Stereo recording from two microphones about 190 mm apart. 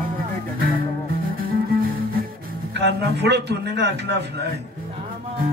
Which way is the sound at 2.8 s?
60° right (ahead or behind).